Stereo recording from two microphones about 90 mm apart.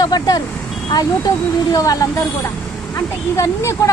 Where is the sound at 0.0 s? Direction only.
50° left (ahead or behind).